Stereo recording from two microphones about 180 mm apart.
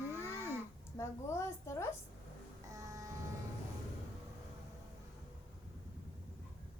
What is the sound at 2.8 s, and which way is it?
Vehicle, 20° right (ahead or behind).